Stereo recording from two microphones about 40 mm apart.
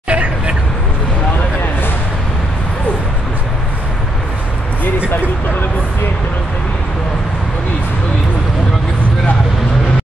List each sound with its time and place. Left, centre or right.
0.1 s hubbub: right